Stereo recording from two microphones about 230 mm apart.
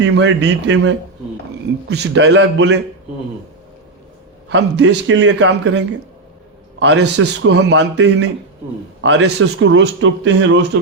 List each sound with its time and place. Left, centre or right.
0.2 s a man's voice: right
4.4 s a man's voice: right